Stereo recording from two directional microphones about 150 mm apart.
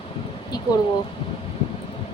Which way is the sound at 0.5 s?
25° left (ahead or behind).